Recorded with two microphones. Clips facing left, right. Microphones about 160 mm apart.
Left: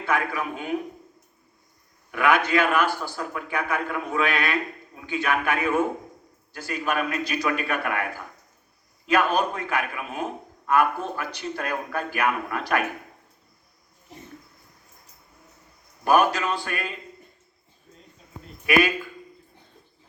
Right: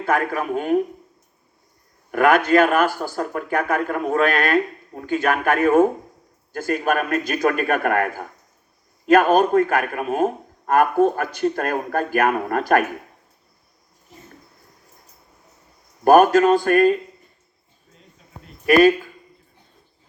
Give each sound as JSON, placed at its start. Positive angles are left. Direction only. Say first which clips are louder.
{"t": 0.0, "sound": "speech", "louder": "right 5 dB", "side_deg": -45}
{"t": 2.0, "sound": "speech", "louder": "right 6 dB", "side_deg": -45}
{"t": 16.0, "sound": "speech", "louder": "right 8 dB", "side_deg": -50}
{"t": 18.6, "sound": "speech", "louder": "right 8 dB", "side_deg": -40}